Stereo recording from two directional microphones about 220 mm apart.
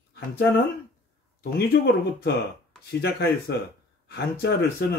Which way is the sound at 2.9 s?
45° left (ahead or behind).